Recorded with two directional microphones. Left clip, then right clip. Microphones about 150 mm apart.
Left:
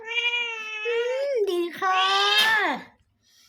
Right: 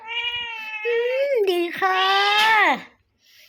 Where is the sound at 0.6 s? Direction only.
20° right (ahead or behind); by 2.9 s 35° right (ahead or behind).